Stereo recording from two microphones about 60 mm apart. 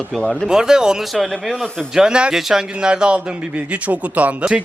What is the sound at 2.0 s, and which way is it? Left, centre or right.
Speech, centre.